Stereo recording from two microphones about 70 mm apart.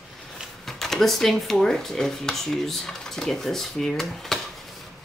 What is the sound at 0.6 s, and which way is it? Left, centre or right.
Speech, centre.